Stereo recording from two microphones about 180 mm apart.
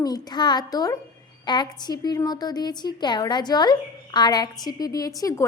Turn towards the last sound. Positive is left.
turn(degrees=20)  # may be behind; listen again after turning